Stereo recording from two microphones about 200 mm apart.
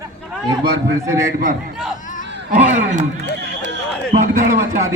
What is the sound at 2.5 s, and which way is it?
Speech, 35° right (ahead or behind).